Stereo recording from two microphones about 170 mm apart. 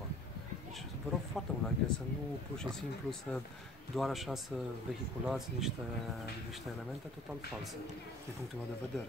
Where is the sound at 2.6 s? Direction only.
5° left (ahead or behind).